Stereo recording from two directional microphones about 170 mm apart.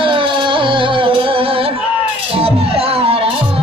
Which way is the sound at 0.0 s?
30° right (ahead or behind).